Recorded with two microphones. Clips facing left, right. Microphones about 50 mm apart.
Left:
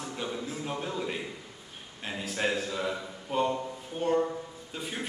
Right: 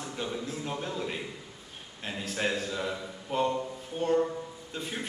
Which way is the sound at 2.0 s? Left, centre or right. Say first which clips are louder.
Left 1 dB; centre.